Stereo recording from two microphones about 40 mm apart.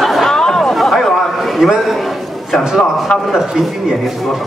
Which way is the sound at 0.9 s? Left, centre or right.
Centre.